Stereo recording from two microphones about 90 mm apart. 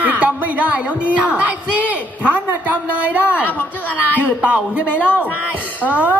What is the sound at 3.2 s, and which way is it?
Speech, 20° left (ahead or behind).